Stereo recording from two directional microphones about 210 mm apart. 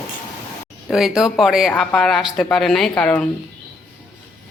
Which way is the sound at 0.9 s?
Centre (ahead or behind).